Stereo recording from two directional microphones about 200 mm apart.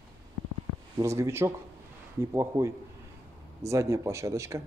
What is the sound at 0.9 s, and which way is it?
Speech, 15° right (ahead or behind).